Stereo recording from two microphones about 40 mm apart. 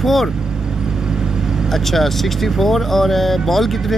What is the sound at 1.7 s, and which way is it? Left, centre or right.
Speech, centre.